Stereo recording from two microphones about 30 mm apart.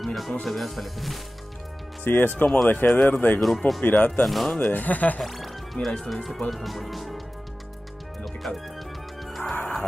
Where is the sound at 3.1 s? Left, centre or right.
Left.